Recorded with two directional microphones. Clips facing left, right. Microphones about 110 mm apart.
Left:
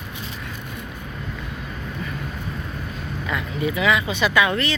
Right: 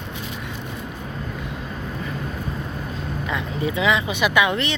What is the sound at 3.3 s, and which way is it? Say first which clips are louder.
Speech: left 1 dB; 25° right (ahead or behind).